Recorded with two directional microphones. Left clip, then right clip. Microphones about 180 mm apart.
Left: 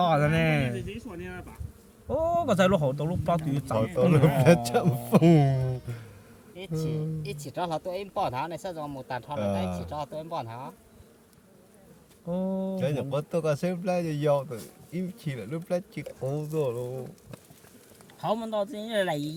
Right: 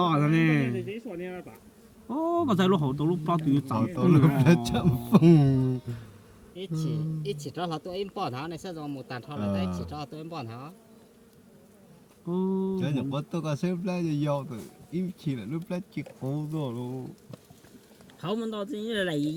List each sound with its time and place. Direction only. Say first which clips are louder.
0.0 s speech: left 1 dB; 30° left (ahead or behind)
0.8 s speech: right 3 dB; centre (ahead or behind)
2.0 s a man's voice: left 2 dB; 30° left (ahead or behind); by 5.7 s 50° left (ahead or behind)
6.6 s speech: left 2 dB; 60° left (ahead or behind)
12.3 s a man's voice: right 1 dB; 30° left (ahead or behind); by 16.7 s 55° left (ahead or behind)
18.2 s a man's voice: left 4 dB; 30° left (ahead or behind)